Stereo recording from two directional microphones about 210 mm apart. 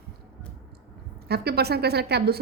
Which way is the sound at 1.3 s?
50° right (ahead or behind).